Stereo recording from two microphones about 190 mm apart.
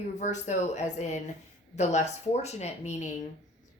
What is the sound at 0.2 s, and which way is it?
Speech, 40° left (ahead or behind).